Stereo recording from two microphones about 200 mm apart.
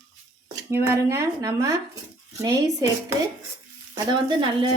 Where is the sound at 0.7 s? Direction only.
15° right (ahead or behind).